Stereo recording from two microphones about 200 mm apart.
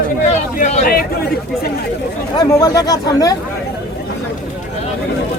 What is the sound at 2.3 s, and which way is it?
Speech, 20° left (ahead or behind).